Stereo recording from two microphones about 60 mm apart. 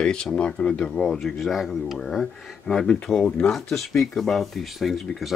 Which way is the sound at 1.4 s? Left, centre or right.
Centre.